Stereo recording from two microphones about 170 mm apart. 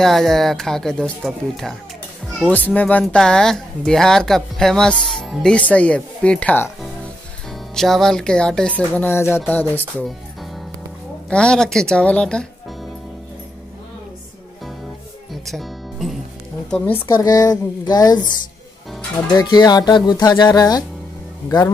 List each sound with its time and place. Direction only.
0.0 s speech: centre (ahead or behind)
10.0 s music: centre (ahead or behind)
11.2 s speech: 5° left (ahead or behind)
15.4 s music: centre (ahead or behind)
16.7 s speech: 10° left (ahead or behind)
17.1 s speech: 20° left (ahead or behind)
19.3 s speech: 25° left (ahead or behind)